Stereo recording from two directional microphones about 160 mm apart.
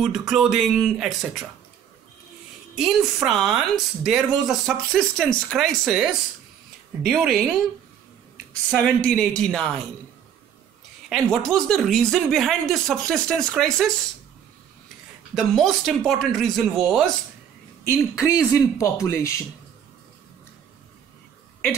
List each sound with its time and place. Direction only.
0.0 s speech: centre (ahead or behind)
3.3 s speech: 5° right (ahead or behind)
7.1 s speech: centre (ahead or behind)
8.6 s speech: 5° left (ahead or behind)
11.1 s speech: 5° left (ahead or behind)
15.3 s speech: centre (ahead or behind)
17.8 s speech: 20° left (ahead or behind)